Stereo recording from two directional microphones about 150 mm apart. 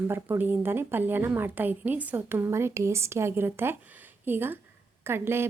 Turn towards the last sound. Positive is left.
turn(degrees=-15)  # may be behind; listen again after turning